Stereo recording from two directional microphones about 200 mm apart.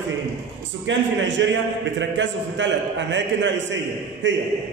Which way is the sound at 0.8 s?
65° right (ahead or behind).